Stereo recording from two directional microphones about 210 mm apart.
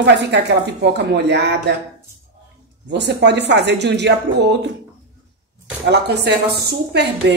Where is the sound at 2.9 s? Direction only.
55° right (ahead or behind).